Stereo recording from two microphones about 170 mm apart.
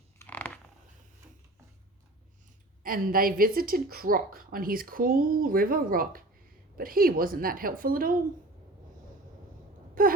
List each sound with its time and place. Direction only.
0.2 s a sound: 10° left (ahead or behind)
2.8 s a woman's voice: 60° right (ahead or behind)
10.0 s a woman's voice: 55° right (ahead or behind)